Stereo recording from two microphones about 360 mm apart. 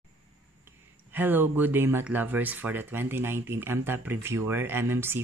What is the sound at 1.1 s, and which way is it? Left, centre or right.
Speech, centre.